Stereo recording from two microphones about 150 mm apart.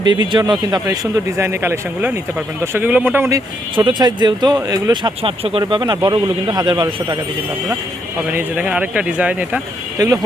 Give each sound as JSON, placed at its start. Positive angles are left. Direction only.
{"t": 0.0, "sound": "speech", "side_deg": -30}
{"t": 0.9, "sound": "speech", "side_deg": -15}
{"t": 3.8, "sound": "speech", "side_deg": -30}
{"t": 8.3, "sound": "speech", "side_deg": -10}